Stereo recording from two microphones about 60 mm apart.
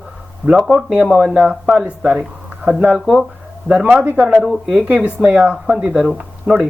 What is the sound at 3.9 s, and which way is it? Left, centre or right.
Speech, right.